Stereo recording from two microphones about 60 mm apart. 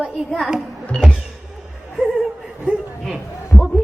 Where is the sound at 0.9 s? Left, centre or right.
Centre.